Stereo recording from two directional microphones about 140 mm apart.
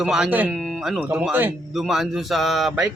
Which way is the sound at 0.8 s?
10° right (ahead or behind).